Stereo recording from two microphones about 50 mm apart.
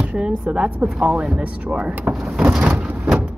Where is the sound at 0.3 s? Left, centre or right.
Right.